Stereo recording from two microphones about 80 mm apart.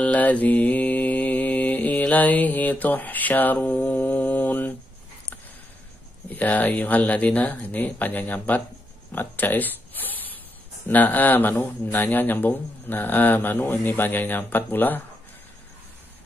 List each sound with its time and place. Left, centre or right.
0.0 s mantra: centre
6.2 s speech: left
9.1 s zipper: left
10.9 s speech: left